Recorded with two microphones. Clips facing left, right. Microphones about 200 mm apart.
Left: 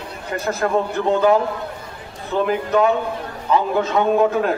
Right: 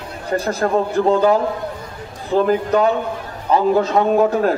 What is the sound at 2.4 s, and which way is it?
A man's voice, 35° right (ahead or behind).